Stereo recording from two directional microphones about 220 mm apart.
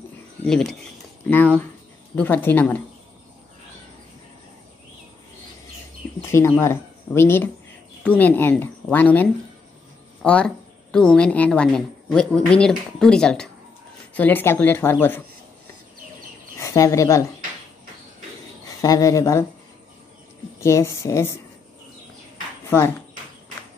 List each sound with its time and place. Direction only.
0.5 s a woman's voice: centre (ahead or behind)
6.6 s a woman's voice: 10° left (ahead or behind)
16.5 s speech: 15° left (ahead or behind)
18.8 s a woman's voice: 15° left (ahead or behind)
20.6 s a woman's voice: 10° left (ahead or behind)
22.7 s speech: 10° left (ahead or behind)